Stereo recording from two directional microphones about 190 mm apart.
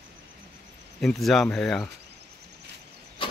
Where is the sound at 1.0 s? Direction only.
Centre (ahead or behind).